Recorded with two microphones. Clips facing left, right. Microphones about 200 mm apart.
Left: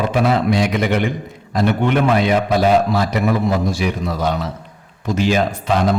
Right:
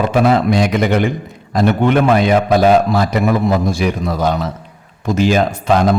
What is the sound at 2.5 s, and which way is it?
A man's voice, 50° right (ahead or behind).